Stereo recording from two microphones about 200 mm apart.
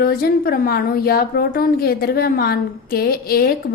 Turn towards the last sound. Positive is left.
turn(degrees=50)  # may be behind; listen again after turning